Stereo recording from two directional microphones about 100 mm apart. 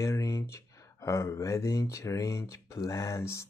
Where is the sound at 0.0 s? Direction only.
30° left (ahead or behind).